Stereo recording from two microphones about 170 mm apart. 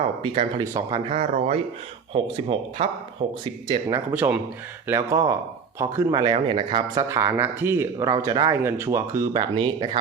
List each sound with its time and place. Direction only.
0.2 s speech: 30° right (ahead or behind)
1.1 s speech: 40° right (ahead or behind)
3.9 s speech: 10° right (ahead or behind); by 7.0 s 30° right (ahead or behind)
7.1 s speech: 15° right (ahead or behind)
9.3 s speech: 30° right (ahead or behind)